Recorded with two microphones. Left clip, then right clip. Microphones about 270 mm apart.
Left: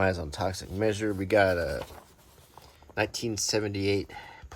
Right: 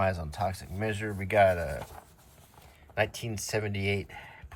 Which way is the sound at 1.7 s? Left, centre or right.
Centre.